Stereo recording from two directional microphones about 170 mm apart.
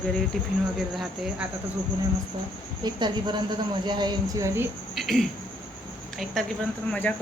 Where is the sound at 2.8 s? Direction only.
25° right (ahead or behind).